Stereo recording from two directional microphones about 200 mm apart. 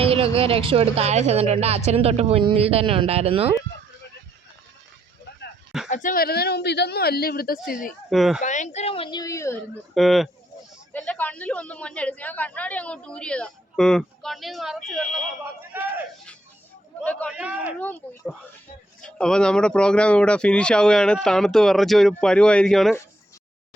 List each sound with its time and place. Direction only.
0.0 s a woman's voice: 30° right (ahead or behind)
5.9 s speech: 40° left (ahead or behind)
8.1 s speech: centre (ahead or behind)
8.4 s speech: 35° left (ahead or behind); by 9.6 s 15° left (ahead or behind)
9.9 s speech: centre (ahead or behind)
15.7 s a sound: 10° right (ahead or behind)
17.0 s a man's voice: 10° left (ahead or behind)
17.3 s speech: 5° right (ahead or behind)
17.7 s speech: 10° left (ahead or behind)